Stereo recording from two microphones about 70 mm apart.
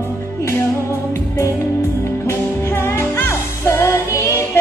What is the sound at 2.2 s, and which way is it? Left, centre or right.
Music, left.